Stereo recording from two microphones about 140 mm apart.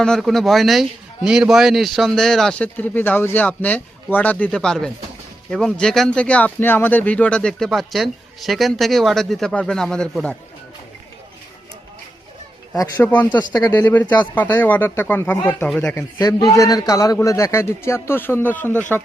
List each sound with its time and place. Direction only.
0.0 s a man's voice: centre (ahead or behind)
13.0 s speech: 10° left (ahead or behind)
13.3 s a man's voice: 30° left (ahead or behind)
13.7 s speech: 15° left (ahead or behind)
16.0 s a man's voice: 25° left (ahead or behind)